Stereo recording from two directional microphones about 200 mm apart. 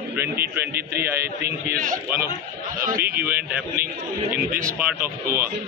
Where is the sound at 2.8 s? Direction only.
45° right (ahead or behind).